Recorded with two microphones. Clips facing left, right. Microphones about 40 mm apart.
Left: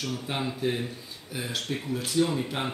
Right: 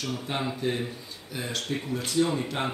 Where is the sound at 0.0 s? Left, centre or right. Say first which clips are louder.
Right 1 dB; centre.